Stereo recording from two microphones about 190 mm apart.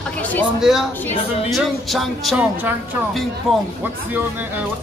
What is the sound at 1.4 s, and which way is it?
Speech, centre (ahead or behind).